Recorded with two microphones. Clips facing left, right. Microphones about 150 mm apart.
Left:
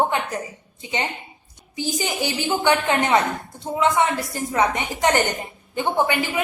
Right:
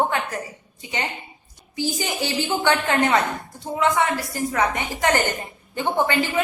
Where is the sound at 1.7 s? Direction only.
20° left (ahead or behind).